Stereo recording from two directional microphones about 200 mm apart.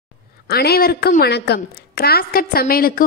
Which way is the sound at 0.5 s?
50° left (ahead or behind).